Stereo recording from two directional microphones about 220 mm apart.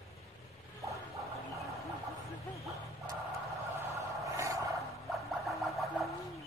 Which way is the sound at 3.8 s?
15° right (ahead or behind).